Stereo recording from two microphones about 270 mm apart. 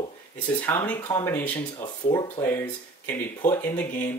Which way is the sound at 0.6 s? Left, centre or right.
Centre.